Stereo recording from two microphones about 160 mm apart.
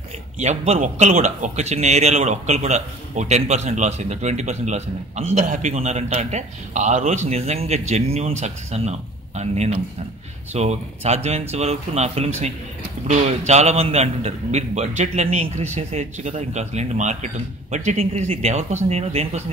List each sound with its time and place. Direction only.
0.4 s a man's voice: 45° right (ahead or behind)